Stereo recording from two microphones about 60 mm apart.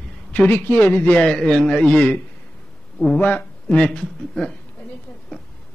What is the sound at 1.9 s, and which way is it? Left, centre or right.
Speech, left.